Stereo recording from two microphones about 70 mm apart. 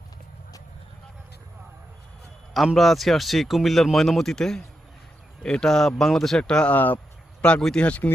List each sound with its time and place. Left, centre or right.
2.7 s speech: centre
6.7 s speech: left
7.4 s speech: centre